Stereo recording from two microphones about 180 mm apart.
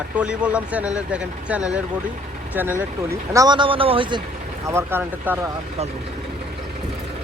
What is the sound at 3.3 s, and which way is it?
Speech, 20° right (ahead or behind).